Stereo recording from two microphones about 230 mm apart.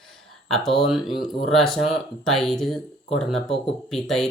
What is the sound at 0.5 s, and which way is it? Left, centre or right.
Speech, centre.